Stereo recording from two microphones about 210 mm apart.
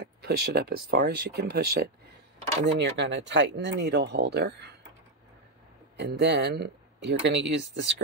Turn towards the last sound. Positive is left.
turn(degrees=-55)  # may be behind; listen again after turning